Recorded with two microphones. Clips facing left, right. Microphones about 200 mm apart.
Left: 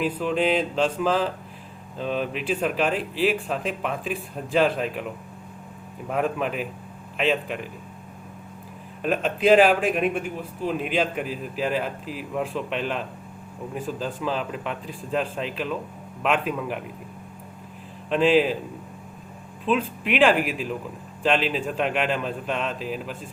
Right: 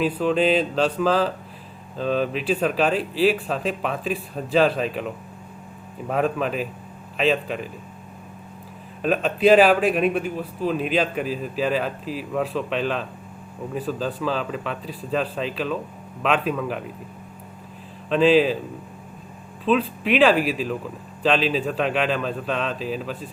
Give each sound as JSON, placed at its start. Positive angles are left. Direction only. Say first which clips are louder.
{"t": 0.0, "sound": "speech", "louder": "right 3 dB", "side_deg": 15}
{"t": 6.1, "sound": "speech", "louder": "right 2 dB", "side_deg": 15}
{"t": 9.0, "sound": "speech", "louder": "right 2 dB", "side_deg": 15}
{"t": 18.1, "sound": "speech", "louder": "right 3 dB", "side_deg": 15}
{"t": 19.6, "sound": "speech", "louder": "right 3 dB", "side_deg": 15}